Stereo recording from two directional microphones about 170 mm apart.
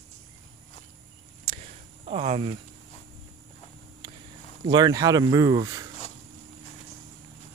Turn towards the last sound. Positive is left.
turn(degrees=-20)  # may be behind; listen again after turning